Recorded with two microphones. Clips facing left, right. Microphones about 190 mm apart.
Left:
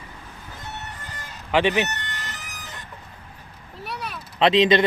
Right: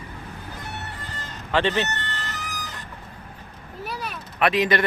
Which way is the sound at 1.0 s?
10° left (ahead or behind).